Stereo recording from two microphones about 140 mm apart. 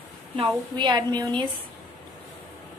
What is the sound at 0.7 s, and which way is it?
Speech, 30° right (ahead or behind).